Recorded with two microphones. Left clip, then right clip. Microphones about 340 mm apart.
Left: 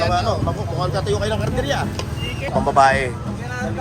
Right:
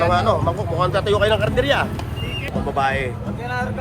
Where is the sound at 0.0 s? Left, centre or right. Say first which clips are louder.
Right 2 dB; right.